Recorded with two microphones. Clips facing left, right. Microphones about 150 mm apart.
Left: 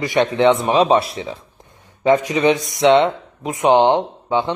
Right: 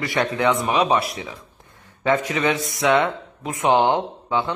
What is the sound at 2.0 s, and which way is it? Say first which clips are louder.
Speech: left 6 dB; 15° left (ahead or behind).